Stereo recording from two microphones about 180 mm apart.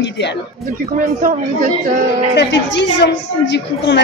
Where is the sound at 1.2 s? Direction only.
45° right (ahead or behind).